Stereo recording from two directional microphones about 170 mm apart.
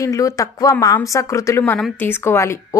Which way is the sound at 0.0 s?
20° left (ahead or behind).